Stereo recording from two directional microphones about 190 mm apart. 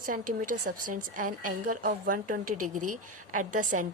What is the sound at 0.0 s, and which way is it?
A woman's voice, 45° right (ahead or behind).